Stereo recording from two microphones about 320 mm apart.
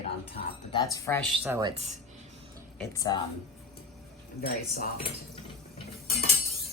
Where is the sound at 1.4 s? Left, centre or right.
Centre.